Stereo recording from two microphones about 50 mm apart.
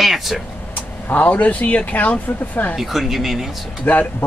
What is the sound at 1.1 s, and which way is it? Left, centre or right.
Speech, left.